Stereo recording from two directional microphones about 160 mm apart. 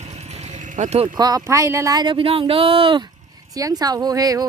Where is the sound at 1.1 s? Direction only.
25° right (ahead or behind).